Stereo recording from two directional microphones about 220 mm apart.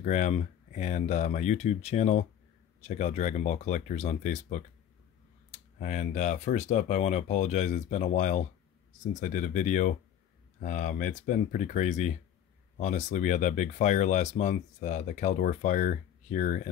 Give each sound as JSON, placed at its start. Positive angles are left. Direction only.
{"t": 0.0, "sound": "speech", "side_deg": 35}